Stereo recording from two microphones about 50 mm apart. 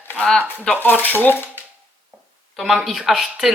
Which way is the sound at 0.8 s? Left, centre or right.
Left.